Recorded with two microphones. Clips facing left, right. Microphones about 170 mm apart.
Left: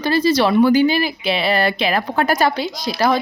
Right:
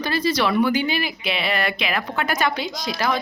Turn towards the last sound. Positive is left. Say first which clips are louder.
# left 6 dB
turn(degrees=35)  # may be behind; listen again after turning